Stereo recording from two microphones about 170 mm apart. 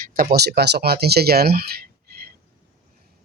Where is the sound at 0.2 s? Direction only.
65° right (ahead or behind).